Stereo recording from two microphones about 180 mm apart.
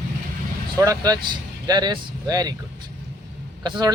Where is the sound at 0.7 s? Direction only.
20° right (ahead or behind).